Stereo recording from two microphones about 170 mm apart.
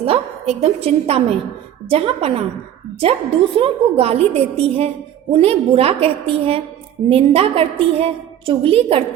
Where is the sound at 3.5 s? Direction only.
35° right (ahead or behind).